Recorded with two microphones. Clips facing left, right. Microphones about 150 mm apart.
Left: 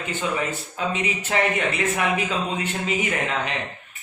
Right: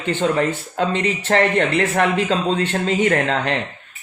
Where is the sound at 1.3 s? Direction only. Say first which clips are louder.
Right 7 dB; 65° right (ahead or behind).